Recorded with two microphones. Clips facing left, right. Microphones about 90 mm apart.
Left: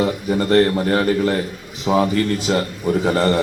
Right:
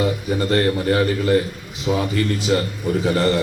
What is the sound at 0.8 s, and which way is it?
A man's voice, 35° left (ahead or behind).